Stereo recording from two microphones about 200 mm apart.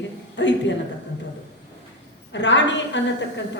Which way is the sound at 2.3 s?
65° left (ahead or behind).